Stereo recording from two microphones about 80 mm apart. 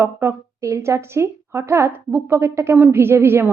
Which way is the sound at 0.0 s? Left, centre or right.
Right.